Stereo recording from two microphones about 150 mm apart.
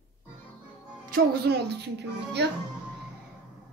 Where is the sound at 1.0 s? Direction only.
80° right.